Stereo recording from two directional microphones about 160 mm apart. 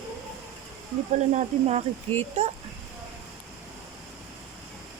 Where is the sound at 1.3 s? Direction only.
45° right (ahead or behind).